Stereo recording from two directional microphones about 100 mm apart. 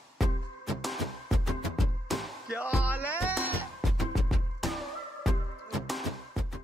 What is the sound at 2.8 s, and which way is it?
Music, 15° right (ahead or behind).